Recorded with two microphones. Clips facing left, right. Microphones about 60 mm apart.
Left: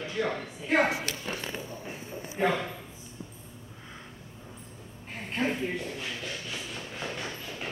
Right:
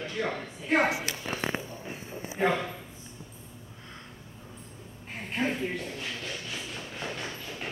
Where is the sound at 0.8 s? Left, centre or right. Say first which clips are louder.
Right 1 dB; centre.